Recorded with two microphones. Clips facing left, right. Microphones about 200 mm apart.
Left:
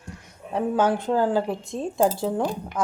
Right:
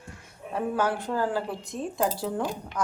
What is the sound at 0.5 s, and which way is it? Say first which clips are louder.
Speech: left 5 dB; 20° left (ahead or behind).